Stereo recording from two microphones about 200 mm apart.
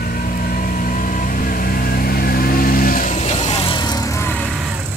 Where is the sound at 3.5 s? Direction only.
25° left (ahead or behind).